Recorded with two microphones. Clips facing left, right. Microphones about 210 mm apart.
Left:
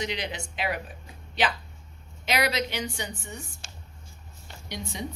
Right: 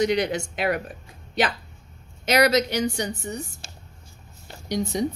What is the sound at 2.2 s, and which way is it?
A woman's voice, 45° right (ahead or behind).